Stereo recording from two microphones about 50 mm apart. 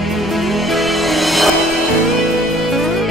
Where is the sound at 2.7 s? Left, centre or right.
Centre.